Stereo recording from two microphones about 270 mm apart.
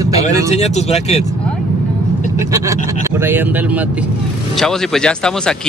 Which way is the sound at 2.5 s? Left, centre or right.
Centre.